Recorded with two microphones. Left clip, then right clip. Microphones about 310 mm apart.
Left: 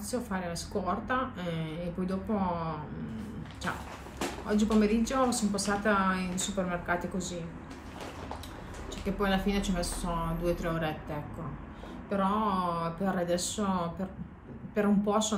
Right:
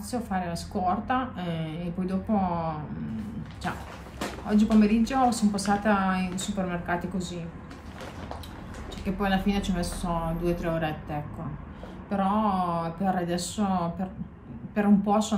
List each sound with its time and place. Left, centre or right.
0.1 s a woman's voice: centre
4.5 s a woman's voice: centre
9.2 s a woman's voice: centre